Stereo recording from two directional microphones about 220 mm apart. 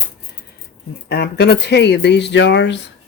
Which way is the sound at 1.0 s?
50° left (ahead or behind).